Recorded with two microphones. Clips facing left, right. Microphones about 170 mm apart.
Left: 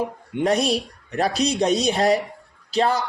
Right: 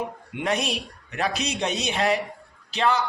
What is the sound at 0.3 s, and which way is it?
Speech, 35° left (ahead or behind).